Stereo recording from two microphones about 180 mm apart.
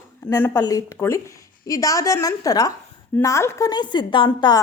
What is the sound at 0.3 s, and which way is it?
A woman's voice, 10° left (ahead or behind).